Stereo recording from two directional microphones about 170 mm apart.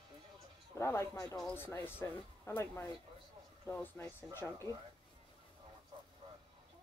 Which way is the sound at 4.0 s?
15° left (ahead or behind).